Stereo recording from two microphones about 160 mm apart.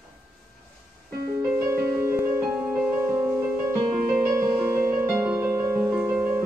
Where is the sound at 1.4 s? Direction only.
15° right (ahead or behind).